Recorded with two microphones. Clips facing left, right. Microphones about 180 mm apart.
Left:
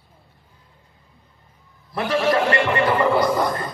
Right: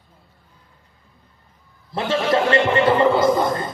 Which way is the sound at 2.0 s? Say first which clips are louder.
Even; 25° right (ahead or behind).